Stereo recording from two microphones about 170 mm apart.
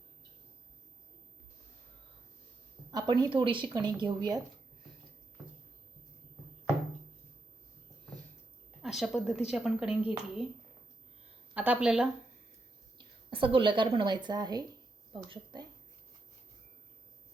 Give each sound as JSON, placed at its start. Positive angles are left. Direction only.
{"t": 2.9, "sound": "a woman's voice", "side_deg": -25}
{"t": 8.8, "sound": "a woman's voice", "side_deg": 0}
{"t": 11.5, "sound": "a woman's voice", "side_deg": -10}
{"t": 13.3, "sound": "a woman's voice", "side_deg": -30}